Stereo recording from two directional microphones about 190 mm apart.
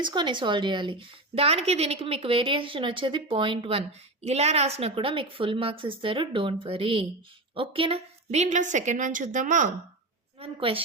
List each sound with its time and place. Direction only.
0.0 s a woman's voice: 25° right (ahead or behind); by 9.6 s 40° right (ahead or behind)
10.4 s a woman's voice: 30° right (ahead or behind)